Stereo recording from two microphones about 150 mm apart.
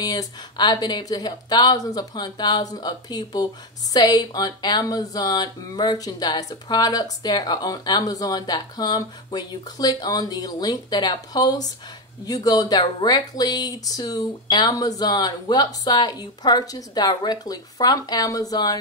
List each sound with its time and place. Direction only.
0.0 s speech: 25° left (ahead or behind)